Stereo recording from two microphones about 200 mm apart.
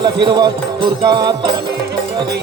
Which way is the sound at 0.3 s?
20° right (ahead or behind).